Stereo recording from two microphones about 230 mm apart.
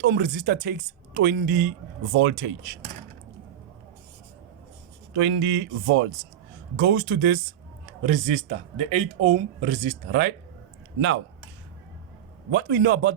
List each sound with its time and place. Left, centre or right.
0.0 s speech: right
2.1 s a man's voice: right
5.1 s a man's voice: right
8.0 s speech: right
10.1 s a man's voice: right
12.5 s a man's voice: right